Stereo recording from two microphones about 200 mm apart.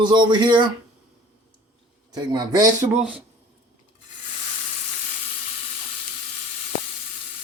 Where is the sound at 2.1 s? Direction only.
20° right (ahead or behind).